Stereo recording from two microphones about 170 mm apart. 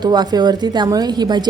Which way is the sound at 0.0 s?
25° right (ahead or behind).